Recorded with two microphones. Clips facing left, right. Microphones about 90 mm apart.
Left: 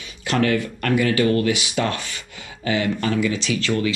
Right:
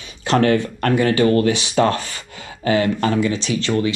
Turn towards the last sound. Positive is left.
turn(degrees=-30)  # may be behind; listen again after turning